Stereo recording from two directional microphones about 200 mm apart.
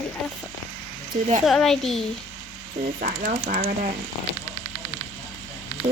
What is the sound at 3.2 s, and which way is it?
Speech, 40° right (ahead or behind).